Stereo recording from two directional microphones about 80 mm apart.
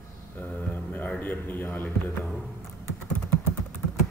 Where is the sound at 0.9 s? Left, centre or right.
Centre.